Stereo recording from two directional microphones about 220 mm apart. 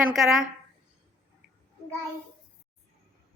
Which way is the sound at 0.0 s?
Centre (ahead or behind).